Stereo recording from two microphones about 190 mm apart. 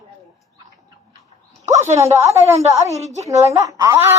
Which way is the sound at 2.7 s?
15° right (ahead or behind).